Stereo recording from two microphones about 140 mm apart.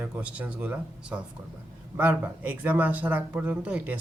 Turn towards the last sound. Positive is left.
turn(degrees=-10)  # may be behind; listen again after turning